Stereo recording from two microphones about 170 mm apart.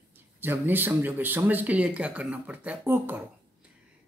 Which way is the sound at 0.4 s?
10° right (ahead or behind).